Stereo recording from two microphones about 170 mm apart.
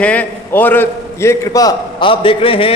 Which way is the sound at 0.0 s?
10° left (ahead or behind).